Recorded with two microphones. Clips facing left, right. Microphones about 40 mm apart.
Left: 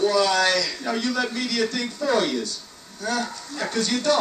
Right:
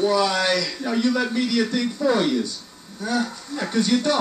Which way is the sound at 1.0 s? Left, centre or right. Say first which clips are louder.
Right 6 dB; centre.